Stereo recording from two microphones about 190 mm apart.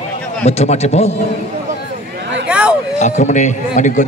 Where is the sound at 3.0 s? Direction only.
40° left (ahead or behind).